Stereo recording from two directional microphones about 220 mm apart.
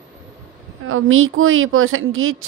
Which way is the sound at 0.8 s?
65° right (ahead or behind).